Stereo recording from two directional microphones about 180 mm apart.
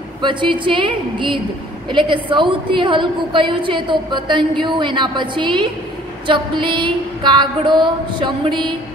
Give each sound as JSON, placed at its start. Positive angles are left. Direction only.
{"t": 0.2, "sound": "a woman's voice", "side_deg": -25}